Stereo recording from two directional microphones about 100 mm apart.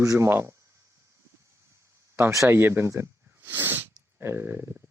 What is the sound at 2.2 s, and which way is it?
Speech, 25° right (ahead or behind).